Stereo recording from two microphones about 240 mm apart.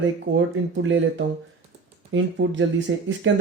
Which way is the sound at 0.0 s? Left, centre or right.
Right.